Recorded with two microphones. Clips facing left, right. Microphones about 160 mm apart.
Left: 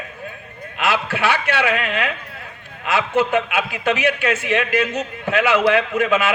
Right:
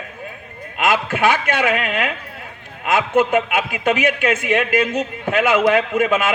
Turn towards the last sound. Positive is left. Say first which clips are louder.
# right 1 dB
turn(degrees=-50)  # may be behind; listen again after turning